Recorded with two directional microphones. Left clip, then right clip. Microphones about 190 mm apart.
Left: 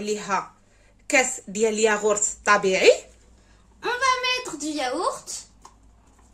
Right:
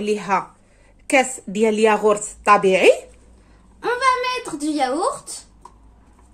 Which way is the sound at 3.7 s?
40° right (ahead or behind).